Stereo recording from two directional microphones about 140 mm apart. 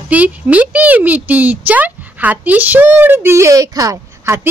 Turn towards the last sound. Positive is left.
turn(degrees=-20)  # may be behind; listen again after turning